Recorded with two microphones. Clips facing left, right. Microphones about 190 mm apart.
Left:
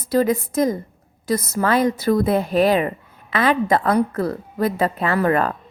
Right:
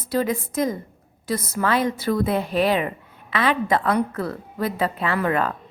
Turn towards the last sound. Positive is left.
turn(degrees=40)  # may be behind; listen again after turning